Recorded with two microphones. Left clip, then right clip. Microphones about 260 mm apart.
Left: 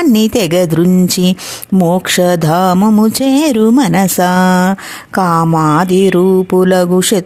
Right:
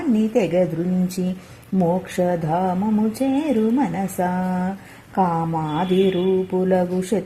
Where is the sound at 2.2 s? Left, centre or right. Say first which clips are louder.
Left 10 dB; left.